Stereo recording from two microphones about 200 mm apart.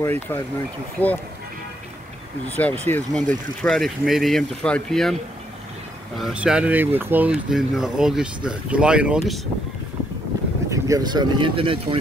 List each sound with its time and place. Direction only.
0.0 s speech: 10° left (ahead or behind)
2.4 s speech: 5° left (ahead or behind)
6.1 s speech: 5° right (ahead or behind)
10.7 s speech: 20° right (ahead or behind)